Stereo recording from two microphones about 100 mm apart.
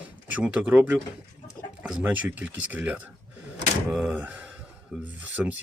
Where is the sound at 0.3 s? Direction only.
15° right (ahead or behind).